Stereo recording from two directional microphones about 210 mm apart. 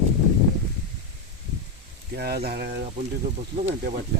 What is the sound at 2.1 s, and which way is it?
Speech, 50° right (ahead or behind).